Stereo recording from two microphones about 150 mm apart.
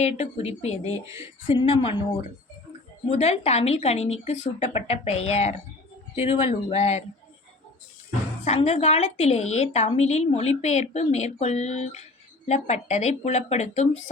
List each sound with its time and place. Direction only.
0.0 s a woman's voice: 45° left (ahead or behind)
1.0 s speech: 20° right (ahead or behind)
1.5 s speech: 35° left (ahead or behind)
3.1 s a woman's voice: 45° left (ahead or behind)
8.4 s a woman's voice: 45° left (ahead or behind)